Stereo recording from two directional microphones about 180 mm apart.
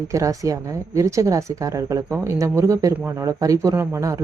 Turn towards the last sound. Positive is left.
turn(degrees=-15)  # may be behind; listen again after turning